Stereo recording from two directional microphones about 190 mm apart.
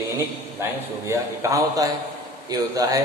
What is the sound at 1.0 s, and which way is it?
A man's voice, 15° right (ahead or behind).